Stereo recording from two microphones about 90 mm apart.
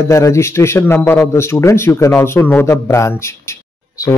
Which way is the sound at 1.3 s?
30° left (ahead or behind).